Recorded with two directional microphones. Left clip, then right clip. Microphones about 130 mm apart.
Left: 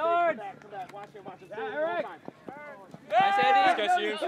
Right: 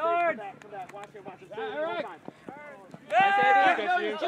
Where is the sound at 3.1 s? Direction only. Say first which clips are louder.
Right 1 dB; centre (ahead or behind).